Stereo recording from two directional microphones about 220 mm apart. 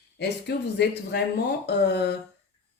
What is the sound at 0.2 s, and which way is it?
Speech, 50° left (ahead or behind).